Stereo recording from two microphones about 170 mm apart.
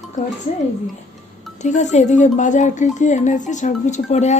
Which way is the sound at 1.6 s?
45° left (ahead or behind).